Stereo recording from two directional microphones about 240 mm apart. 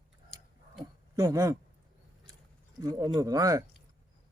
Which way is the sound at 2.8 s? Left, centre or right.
Centre.